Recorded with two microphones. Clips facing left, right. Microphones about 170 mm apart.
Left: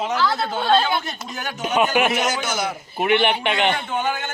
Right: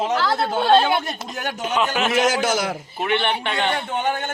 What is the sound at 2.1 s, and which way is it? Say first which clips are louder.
Speech: right 4 dB; 90° right.